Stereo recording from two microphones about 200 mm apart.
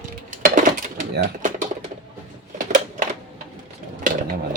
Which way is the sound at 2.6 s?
40° right (ahead or behind).